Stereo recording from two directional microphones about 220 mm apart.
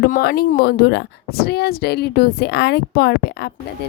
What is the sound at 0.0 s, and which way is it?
Speech, 45° left (ahead or behind).